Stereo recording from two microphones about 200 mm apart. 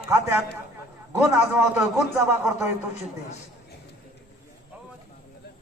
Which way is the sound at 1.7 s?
5° right (ahead or behind).